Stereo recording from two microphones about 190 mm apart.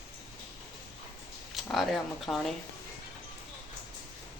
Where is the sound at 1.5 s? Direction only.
Centre (ahead or behind).